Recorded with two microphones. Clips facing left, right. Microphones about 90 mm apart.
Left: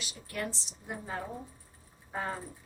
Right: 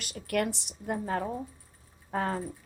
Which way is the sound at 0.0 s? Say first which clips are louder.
Right 8 dB; 65° right (ahead or behind).